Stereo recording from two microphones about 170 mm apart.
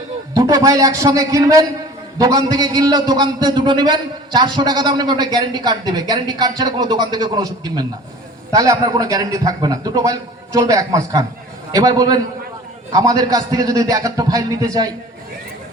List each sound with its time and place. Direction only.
0.3 s a man's voice: 20° right (ahead or behind)